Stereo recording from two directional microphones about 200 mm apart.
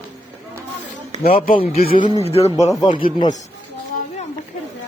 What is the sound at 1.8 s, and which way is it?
Speech, 45° left (ahead or behind).